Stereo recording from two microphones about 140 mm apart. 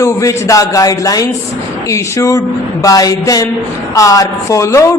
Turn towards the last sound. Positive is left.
turn(degrees=20)  # may be behind; listen again after turning